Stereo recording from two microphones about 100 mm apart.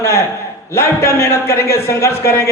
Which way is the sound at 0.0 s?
25° left (ahead or behind).